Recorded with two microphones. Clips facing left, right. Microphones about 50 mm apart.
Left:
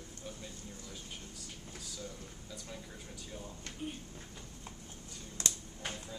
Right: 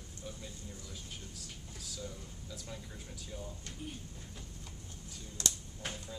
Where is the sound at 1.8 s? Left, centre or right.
Centre.